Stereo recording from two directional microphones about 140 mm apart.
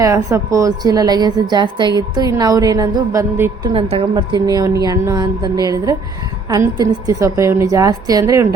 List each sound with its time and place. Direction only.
0.0 s a woman's voice: 20° right (ahead or behind)
3.6 s a woman's voice: 35° right (ahead or behind); by 8.4 s 20° right (ahead or behind)